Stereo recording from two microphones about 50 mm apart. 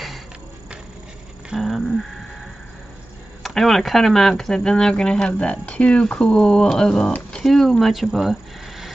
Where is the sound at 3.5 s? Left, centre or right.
Centre.